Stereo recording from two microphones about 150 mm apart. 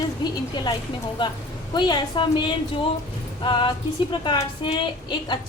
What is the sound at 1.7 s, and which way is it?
A woman's voice, 30° left (ahead or behind).